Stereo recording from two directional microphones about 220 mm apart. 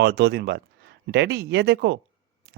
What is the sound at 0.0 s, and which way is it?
Speech, 50° right (ahead or behind).